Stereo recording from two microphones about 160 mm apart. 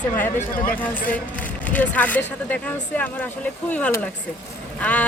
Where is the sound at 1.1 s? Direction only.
10° left (ahead or behind).